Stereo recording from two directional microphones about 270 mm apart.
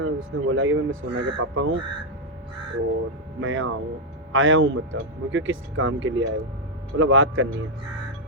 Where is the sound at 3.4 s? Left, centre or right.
Right.